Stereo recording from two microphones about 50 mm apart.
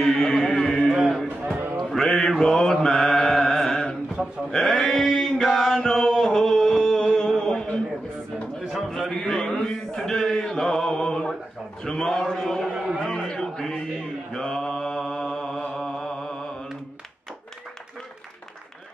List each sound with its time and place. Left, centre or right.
0.0 s music: centre
1.0 s music: centre
1.9 s mantra: centre
5.2 s chant: centre
7.1 s music: centre
7.3 s a sound: centre
8.8 s a sound: centre
9.3 s mantra: centre
11.8 s a sound: centre
14.3 s mantra: centre